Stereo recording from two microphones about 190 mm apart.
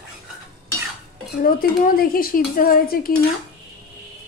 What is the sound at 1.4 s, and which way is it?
Dishes, 50° left (ahead or behind).